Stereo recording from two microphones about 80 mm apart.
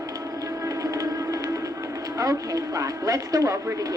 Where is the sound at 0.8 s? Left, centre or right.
Right.